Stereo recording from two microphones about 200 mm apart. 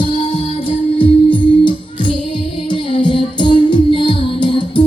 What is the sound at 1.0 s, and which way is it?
Music, 25° left (ahead or behind).